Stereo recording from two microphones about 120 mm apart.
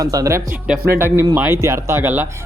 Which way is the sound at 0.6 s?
5° right (ahead or behind).